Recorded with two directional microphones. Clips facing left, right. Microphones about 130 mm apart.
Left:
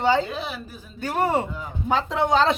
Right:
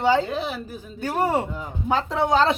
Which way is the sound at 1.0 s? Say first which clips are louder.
Even; 10° right (ahead or behind).